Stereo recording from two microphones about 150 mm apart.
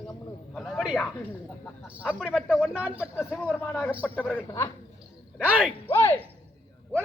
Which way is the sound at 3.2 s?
10° left (ahead or behind).